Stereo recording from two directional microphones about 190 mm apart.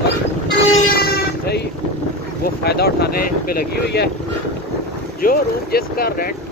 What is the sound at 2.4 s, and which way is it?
Speech, 55° left (ahead or behind).